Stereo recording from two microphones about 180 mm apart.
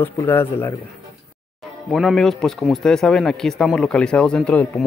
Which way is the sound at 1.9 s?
Centre (ahead or behind).